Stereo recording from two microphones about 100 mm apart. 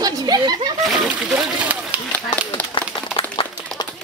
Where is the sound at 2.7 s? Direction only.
55° left (ahead or behind).